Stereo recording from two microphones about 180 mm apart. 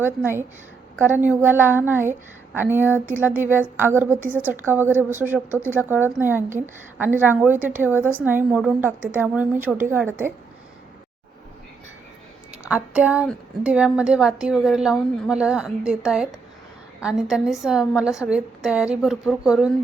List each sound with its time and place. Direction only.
0.0 s a woman's voice: 10° right (ahead or behind)
12.6 s a woman's voice: 5° right (ahead or behind)